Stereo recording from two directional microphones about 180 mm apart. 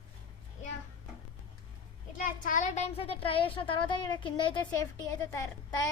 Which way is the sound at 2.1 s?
50° left (ahead or behind).